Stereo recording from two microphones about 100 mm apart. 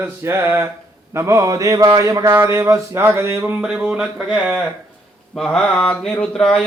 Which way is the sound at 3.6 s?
10° right (ahead or behind).